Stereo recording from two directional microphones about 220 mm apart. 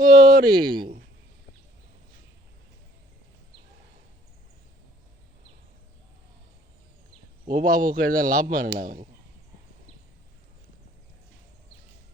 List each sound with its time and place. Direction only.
0.0 s speech: 40° right (ahead or behind)
7.4 s a man's voice: 40° right (ahead or behind)